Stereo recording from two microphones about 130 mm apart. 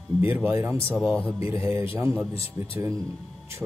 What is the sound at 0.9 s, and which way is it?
Speech, 5° left (ahead or behind).